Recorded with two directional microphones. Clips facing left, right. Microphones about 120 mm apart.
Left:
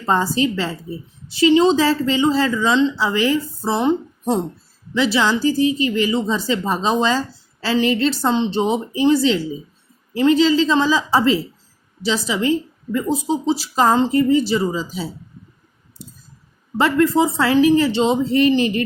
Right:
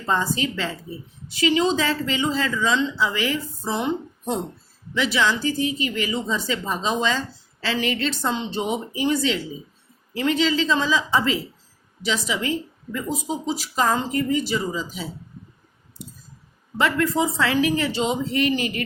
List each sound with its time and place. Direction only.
0.0 s a woman's voice: 35° left (ahead or behind)
16.7 s a woman's voice: 30° left (ahead or behind)